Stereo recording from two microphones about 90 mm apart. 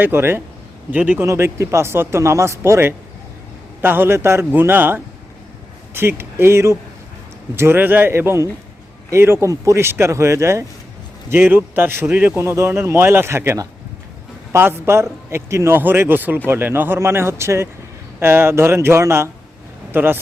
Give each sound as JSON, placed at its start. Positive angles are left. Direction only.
{"t": 0.0, "sound": "a man's voice", "side_deg": -25}
{"t": 1.3, "sound": "a man's voice", "side_deg": -35}
{"t": 12.4, "sound": "a man's voice", "side_deg": -30}